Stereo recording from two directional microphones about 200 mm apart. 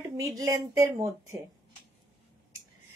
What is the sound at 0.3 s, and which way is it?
Speech, 15° right (ahead or behind).